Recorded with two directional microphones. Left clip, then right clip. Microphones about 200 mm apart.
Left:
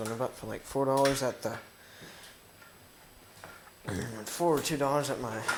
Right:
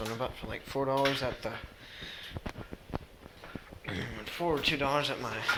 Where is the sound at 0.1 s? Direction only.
35° left (ahead or behind).